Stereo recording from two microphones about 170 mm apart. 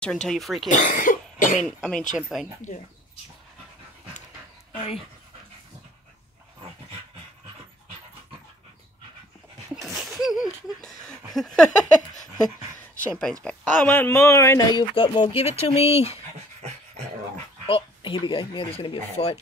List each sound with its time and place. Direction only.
0.0 s speech: 5° left (ahead or behind)
0.7 s cough: 50° left (ahead or behind)
1.8 s speech: 5° left (ahead or behind)
9.8 s a sound: centre (ahead or behind)
11.3 s speech: 5° left (ahead or behind)
13.2 s speech: 5° left (ahead or behind); by 15.2 s 25° left (ahead or behind)
15.2 s speech: 35° left (ahead or behind)
17.6 s speech: 30° left (ahead or behind)